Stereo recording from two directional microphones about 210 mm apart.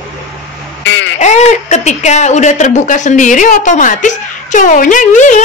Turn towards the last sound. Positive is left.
turn(degrees=35)  # may be behind; listen again after turning